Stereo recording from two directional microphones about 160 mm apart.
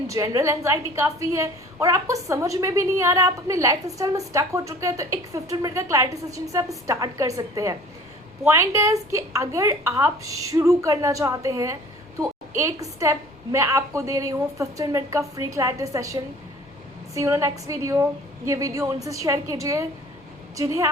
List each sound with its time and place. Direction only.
0.1 s a woman's voice: 20° right (ahead or behind)